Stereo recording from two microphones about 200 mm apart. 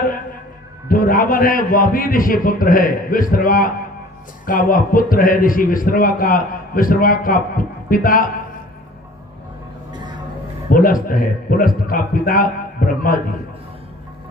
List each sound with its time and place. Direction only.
0.9 s a man's voice: 45° left (ahead or behind)
10.7 s a man's voice: 45° left (ahead or behind)